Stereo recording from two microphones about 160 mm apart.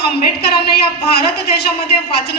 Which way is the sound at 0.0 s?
80° left.